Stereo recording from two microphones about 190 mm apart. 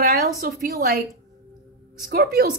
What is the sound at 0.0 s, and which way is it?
Speech, 50° right (ahead or behind).